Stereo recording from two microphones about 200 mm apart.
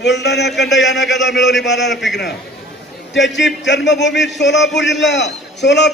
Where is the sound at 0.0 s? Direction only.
60° left (ahead or behind).